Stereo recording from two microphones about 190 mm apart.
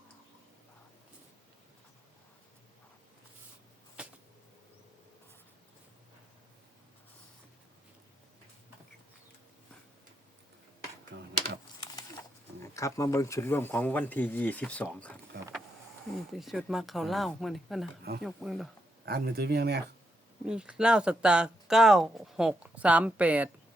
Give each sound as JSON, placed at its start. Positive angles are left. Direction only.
{"t": 4.0, "sound": "a sound", "side_deg": -5}
{"t": 11.1, "sound": "typing", "side_deg": -60}
{"t": 12.6, "sound": "speech", "side_deg": 15}
{"t": 16.3, "sound": "speech", "side_deg": 0}
{"t": 19.0, "sound": "speech", "side_deg": -55}
{"t": 20.4, "sound": "speech", "side_deg": -5}